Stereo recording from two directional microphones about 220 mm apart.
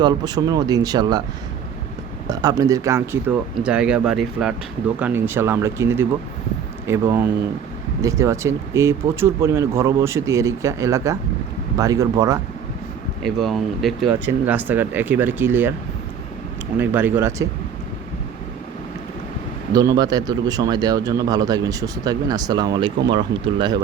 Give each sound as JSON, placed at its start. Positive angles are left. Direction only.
{"t": 0.0, "sound": "a man's voice", "side_deg": -20}
{"t": 2.2, "sound": "a man's voice", "side_deg": -15}
{"t": 13.2, "sound": "a man's voice", "side_deg": 0}
{"t": 16.7, "sound": "a man's voice", "side_deg": -10}
{"t": 19.7, "sound": "a man's voice", "side_deg": -15}